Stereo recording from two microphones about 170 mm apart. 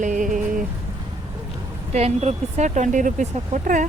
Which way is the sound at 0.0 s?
50° right (ahead or behind).